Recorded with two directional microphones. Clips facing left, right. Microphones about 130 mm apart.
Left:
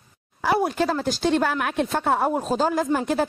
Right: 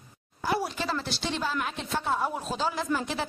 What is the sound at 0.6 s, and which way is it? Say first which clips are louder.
Speech: left 8 dB; 50° left (ahead or behind).